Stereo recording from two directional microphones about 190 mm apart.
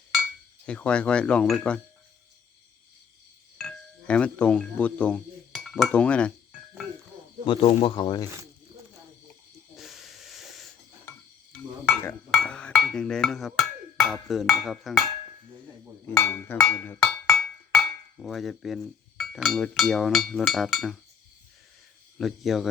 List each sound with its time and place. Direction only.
0.6 s speech: 5° left (ahead or behind)
3.6 s speech: 5° left (ahead or behind)
7.4 s speech: 25° left (ahead or behind)
9.7 s hiss: centre (ahead or behind)
11.5 s a sound: 5° left (ahead or behind)
16.0 s a sound: 10° left (ahead or behind)
18.2 s speech: centre (ahead or behind)
22.2 s speech: centre (ahead or behind)